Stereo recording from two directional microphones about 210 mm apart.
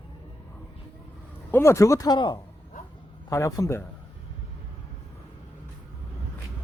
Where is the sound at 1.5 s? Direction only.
10° left (ahead or behind).